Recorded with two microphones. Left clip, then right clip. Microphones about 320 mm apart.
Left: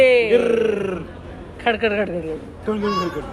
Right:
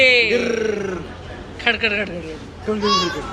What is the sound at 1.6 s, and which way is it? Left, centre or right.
Speech, centre.